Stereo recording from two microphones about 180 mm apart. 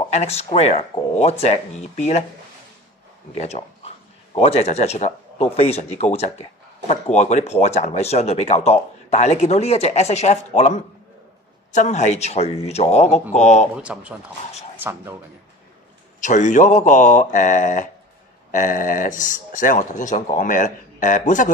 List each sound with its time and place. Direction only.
0.1 s speech: 35° left (ahead or behind)
3.3 s speech: 35° left (ahead or behind)
13.7 s speech: 5° right (ahead or behind)
16.2 s speech: 45° left (ahead or behind)